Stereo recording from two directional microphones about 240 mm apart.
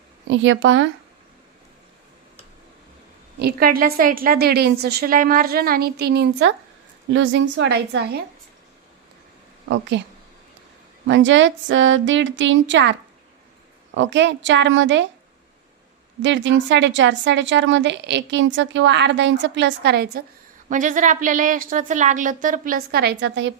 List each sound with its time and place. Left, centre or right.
0.3 s a woman's voice: right
3.3 s a woman's voice: right
9.6 s a woman's voice: right
11.0 s a woman's voice: right
16.2 s a woman's voice: right
20.7 s a woman's voice: right